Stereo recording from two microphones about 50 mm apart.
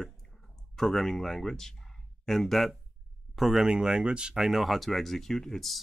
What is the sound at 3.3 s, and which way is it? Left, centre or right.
Speech, centre.